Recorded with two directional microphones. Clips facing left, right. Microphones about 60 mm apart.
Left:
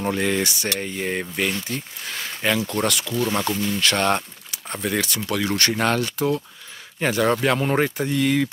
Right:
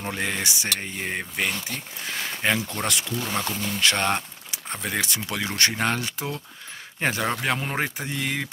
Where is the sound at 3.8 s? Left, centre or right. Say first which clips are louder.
Left 1 dB; centre.